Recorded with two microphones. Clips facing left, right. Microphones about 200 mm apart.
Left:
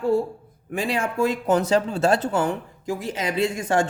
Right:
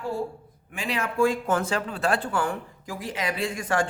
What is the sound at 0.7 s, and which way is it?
Speech, 35° left (ahead or behind).